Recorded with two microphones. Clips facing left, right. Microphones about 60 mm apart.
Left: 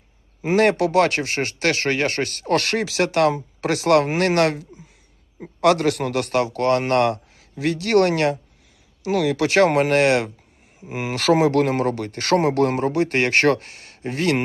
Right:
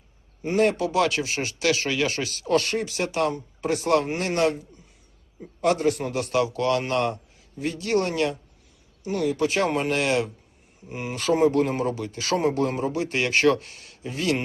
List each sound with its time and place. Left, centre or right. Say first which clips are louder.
0.4 s speech: left 4 dB; left
2.6 s speech: left 5 dB; left
9.0 s speech: left 4 dB; left
10.8 s speech: left 6 dB; left